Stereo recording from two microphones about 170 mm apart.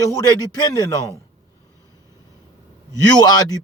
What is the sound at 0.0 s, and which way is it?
Speech, 20° left (ahead or behind).